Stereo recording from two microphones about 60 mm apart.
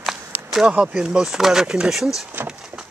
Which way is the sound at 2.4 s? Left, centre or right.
Right.